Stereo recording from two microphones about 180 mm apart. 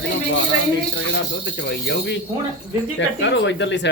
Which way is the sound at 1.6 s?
65° left (ahead or behind).